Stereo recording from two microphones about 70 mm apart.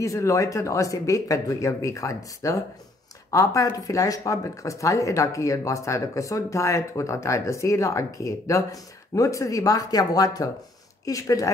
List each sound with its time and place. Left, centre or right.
0.0 s speech: left